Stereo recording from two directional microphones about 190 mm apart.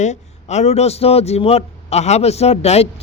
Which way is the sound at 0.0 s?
35° left (ahead or behind).